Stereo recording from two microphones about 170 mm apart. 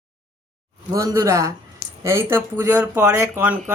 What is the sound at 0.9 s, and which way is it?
Speech, 20° right (ahead or behind).